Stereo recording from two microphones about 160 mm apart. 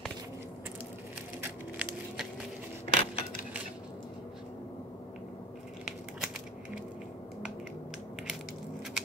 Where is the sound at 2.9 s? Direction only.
35° left (ahead or behind).